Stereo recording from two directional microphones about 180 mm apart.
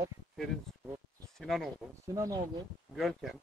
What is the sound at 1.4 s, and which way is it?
Speech, centre (ahead or behind).